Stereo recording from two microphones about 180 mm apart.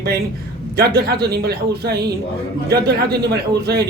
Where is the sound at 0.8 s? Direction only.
60° right (ahead or behind).